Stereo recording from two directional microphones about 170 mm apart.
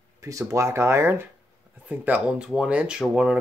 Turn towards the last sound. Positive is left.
turn(degrees=-5)  # may be behind; listen again after turning